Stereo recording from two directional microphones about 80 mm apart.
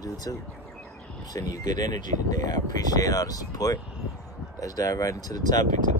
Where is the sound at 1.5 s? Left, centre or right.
Left.